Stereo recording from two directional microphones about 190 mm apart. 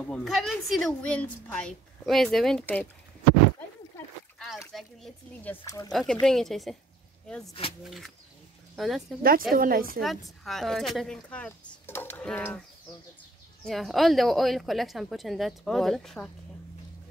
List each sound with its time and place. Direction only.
0.0 s a woman's voice: 5° left (ahead or behind)
3.9 s a sound: 15° left (ahead or behind)
4.7 s speech: 5° left (ahead or behind)
5.9 s a woman's voice: centre (ahead or behind)
9.5 s a woman's voice: 50° right (ahead or behind)
9.9 s a woman's voice: centre (ahead or behind)
13.7 s a woman's voice: centre (ahead or behind)